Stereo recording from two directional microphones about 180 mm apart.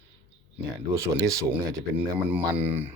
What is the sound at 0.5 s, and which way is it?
Speech, 15° right (ahead or behind).